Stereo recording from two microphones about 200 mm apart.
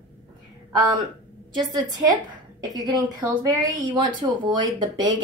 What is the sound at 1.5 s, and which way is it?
Speech, 20° right (ahead or behind).